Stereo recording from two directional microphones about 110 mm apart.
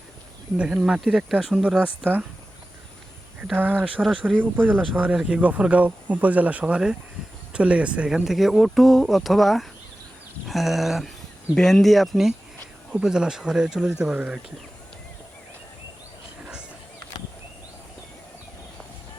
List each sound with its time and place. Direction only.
0.6 s speech: 10° right (ahead or behind)
3.5 s speech: 15° right (ahead or behind)